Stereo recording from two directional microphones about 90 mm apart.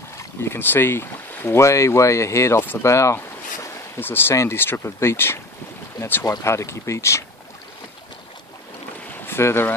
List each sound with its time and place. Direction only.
0.2 s speech: 30° left (ahead or behind)
9.1 s boat: 25° left (ahead or behind)